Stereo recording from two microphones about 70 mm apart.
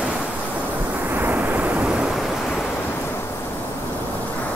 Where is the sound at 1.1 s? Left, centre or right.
Right.